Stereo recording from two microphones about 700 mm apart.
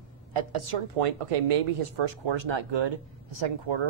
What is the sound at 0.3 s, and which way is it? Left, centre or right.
Speech, right.